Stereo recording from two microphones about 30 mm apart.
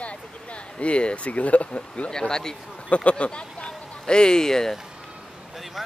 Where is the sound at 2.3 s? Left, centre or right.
Centre.